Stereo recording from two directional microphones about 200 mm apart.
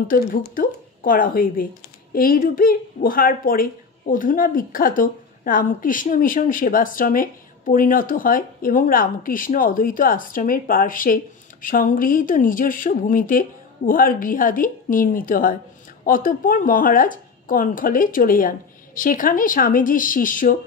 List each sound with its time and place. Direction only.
0.1 s a woman's voice: 45° left (ahead or behind)